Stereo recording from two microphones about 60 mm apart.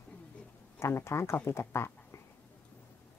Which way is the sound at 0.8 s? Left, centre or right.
Left.